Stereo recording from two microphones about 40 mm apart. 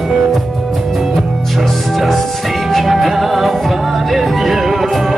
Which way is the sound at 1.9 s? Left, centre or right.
Centre.